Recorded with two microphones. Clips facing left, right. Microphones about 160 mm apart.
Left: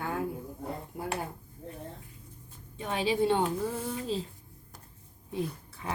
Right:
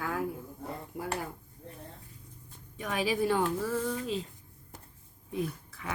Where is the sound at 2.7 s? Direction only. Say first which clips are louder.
Left 1 dB; 30° left (ahead or behind).